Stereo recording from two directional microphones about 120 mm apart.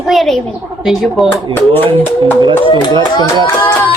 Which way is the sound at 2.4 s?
40° right (ahead or behind).